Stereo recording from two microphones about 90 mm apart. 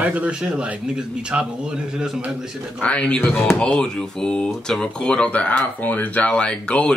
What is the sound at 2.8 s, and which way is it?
Speech, 15° left (ahead or behind).